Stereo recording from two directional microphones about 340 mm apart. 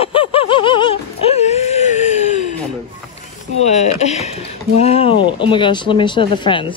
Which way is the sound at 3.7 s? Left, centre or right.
Centre.